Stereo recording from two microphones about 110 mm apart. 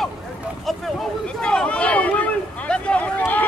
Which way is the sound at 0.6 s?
Centre (ahead or behind).